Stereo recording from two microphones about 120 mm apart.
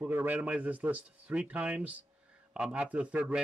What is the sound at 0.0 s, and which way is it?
Speech, 15° right (ahead or behind).